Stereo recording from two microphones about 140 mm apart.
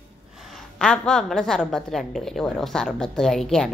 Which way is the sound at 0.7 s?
5° left (ahead or behind).